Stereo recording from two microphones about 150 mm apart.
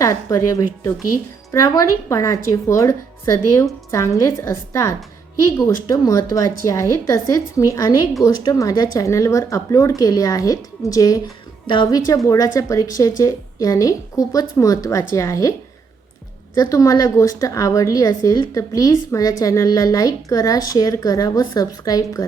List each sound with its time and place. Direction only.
0.0 s a woman's voice: 20° left (ahead or behind)
16.6 s a woman's voice: 25° left (ahead or behind)